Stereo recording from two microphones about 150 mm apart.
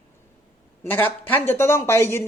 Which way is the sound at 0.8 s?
15° left (ahead or behind).